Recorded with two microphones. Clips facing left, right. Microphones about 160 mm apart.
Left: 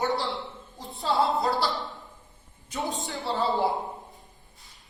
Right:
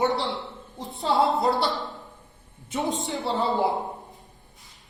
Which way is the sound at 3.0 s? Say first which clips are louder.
Right 2 dB; 20° right (ahead or behind).